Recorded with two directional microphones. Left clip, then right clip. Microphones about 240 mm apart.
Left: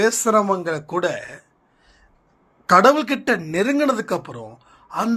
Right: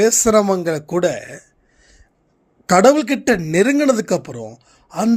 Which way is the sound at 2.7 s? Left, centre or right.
Right.